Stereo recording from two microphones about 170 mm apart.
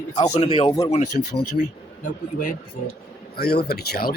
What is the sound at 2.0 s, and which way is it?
Speech, 50° left (ahead or behind).